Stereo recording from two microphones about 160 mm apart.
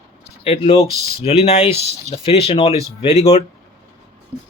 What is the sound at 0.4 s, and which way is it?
Speech, 35° left (ahead or behind).